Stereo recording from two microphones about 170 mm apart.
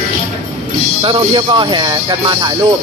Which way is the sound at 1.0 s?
30° right (ahead or behind).